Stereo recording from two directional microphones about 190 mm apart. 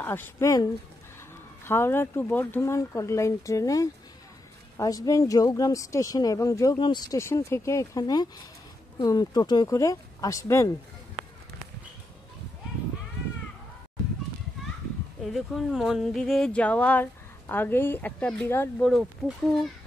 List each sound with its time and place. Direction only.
0.0 s speech: 10° left (ahead or behind)
1.7 s speech: 10° left (ahead or behind)
15.3 s speech: centre (ahead or behind)